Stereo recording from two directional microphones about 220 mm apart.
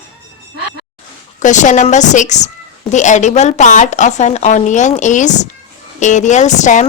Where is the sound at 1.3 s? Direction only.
35° left (ahead or behind).